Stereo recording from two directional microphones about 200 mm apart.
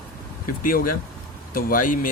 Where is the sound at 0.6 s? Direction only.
45° left (ahead or behind).